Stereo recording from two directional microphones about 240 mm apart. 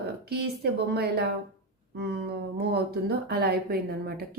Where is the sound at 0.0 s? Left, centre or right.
Right.